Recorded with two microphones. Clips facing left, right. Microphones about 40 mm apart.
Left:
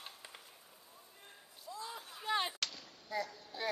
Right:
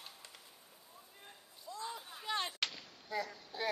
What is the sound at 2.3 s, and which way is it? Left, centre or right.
Artillery fire, centre.